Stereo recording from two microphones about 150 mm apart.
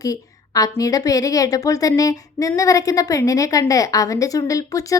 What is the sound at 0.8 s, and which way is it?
A woman's voice, 25° left (ahead or behind).